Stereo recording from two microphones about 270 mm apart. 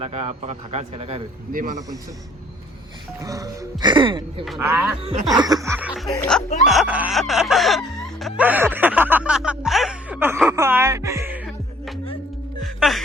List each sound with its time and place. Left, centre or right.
0.0 s a man's voice: right
3.2 s speech: centre
4.4 s speech: centre
5.0 s speech: centre
6.7 s music: centre